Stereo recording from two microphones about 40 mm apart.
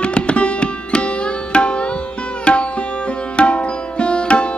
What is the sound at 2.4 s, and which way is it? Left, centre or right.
Sitar, left.